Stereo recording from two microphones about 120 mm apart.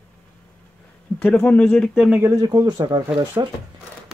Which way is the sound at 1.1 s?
15° left (ahead or behind).